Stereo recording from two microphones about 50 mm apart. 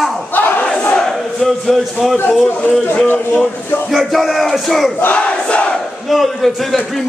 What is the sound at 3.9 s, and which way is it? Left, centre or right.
A man's voice, centre.